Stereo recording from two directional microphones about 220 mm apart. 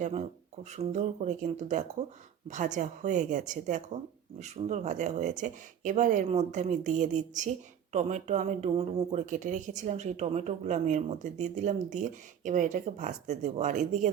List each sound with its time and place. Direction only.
0.0 s speech: 30° right (ahead or behind)